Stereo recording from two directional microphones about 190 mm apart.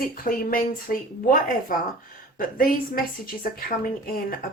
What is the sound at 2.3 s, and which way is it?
Speech, 50° left (ahead or behind).